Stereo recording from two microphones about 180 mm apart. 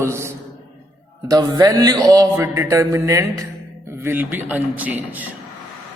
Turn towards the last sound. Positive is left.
turn(degrees=-10)  # may be behind; listen again after turning